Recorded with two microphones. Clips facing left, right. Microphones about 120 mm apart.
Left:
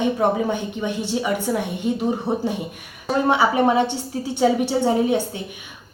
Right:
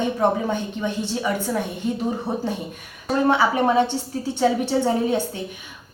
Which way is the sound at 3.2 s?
15° left (ahead or behind).